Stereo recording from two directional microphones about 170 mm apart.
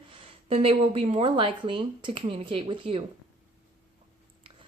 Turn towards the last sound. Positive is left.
turn(degrees=-30)  # may be behind; listen again after turning